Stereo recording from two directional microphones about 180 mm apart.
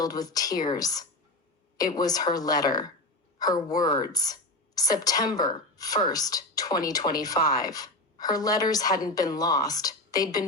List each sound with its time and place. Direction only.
0.0 s a woman's voice: 20° left (ahead or behind)